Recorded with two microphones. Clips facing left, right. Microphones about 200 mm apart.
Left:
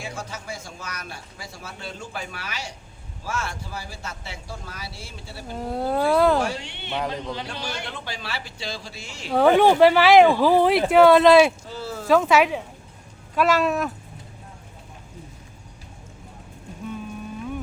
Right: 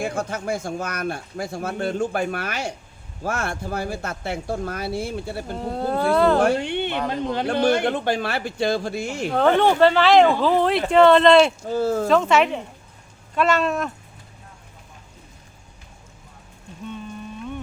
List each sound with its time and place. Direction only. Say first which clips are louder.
0.0 s speech: right 9 dB; 55° right (ahead or behind)
5.5 s speech: left 1 dB; 5° left (ahead or behind)
6.4 s a woman's voice: right 9 dB; 55° right (ahead or behind)
9.3 s speech: left 2 dB; 10° left (ahead or behind)
11.7 s speech: right 11 dB; 50° right (ahead or behind)
12.0 s speech: left 3 dB; 5° left (ahead or behind)
16.8 s a sound: left 1 dB; 5° left (ahead or behind)